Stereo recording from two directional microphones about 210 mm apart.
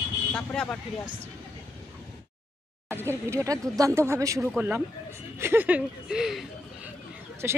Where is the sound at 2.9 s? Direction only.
10° right (ahead or behind).